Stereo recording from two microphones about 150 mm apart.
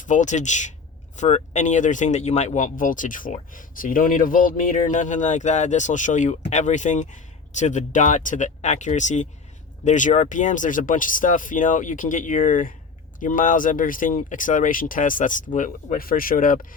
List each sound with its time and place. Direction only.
0.0 s speech: 55° left (ahead or behind)